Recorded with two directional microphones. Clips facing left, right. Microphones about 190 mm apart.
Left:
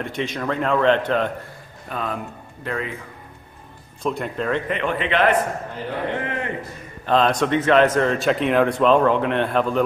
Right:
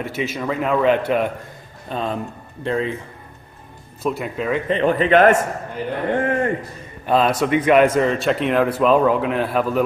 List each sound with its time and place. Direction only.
0.0 s a man's voice: 5° right (ahead or behind)
1.9 s a man's voice: 25° right (ahead or behind)
4.0 s speech: 5° right (ahead or behind)
4.6 s a man's voice: 35° right (ahead or behind)
7.1 s a man's voice: 5° right (ahead or behind)